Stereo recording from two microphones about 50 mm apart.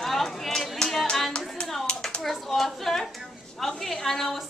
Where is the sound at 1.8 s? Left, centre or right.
Centre.